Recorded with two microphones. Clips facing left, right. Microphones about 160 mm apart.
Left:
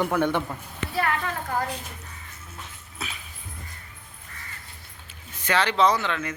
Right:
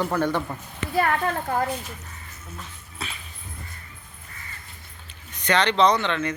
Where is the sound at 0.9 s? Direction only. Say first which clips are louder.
Right 4 dB; 45° right (ahead or behind).